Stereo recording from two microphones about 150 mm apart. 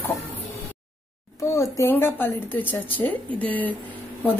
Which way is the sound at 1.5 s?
20° left (ahead or behind).